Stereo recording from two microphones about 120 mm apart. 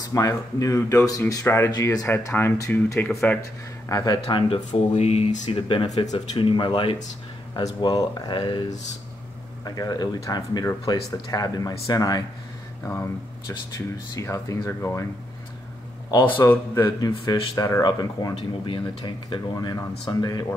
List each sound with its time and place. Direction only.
0.0 s speech: 25° left (ahead or behind)
3.9 s speech: 35° left (ahead or behind)
4.6 s speech: 65° left (ahead or behind); by 7.0 s 50° left (ahead or behind)
7.5 s speech: 35° left (ahead or behind)
9.7 s speech: 35° left (ahead or behind)
12.8 s speech: 20° left (ahead or behind)
16.1 s speech: 40° left (ahead or behind)
16.3 s a man's voice: 15° left (ahead or behind)
17.6 s speech: 30° left (ahead or behind)
18.7 s speech: 45° left (ahead or behind)
19.5 s speech: 30° left (ahead or behind)